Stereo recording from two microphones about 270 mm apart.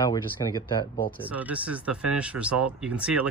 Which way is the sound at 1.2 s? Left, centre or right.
Centre.